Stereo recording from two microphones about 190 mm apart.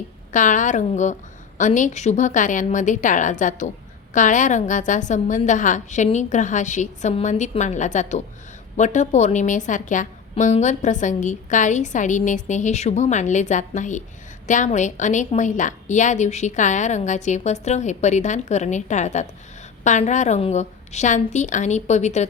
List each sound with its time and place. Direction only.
0.3 s a woman's voice: 40° left (ahead or behind)